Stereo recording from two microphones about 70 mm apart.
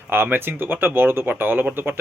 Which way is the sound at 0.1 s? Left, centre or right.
Right.